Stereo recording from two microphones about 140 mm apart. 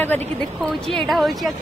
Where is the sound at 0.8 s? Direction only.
Centre (ahead or behind).